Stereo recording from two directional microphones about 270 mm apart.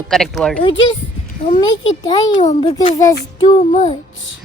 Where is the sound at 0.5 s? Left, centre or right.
Centre.